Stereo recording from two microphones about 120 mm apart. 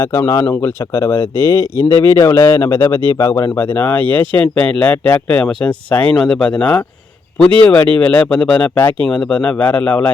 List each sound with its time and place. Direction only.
0.0 s speech: 25° left (ahead or behind)